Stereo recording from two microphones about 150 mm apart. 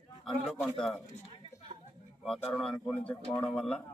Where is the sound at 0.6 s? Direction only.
5° left (ahead or behind).